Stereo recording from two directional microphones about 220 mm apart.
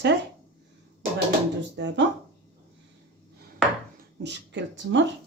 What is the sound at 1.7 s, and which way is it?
Speech, 55° right (ahead or behind).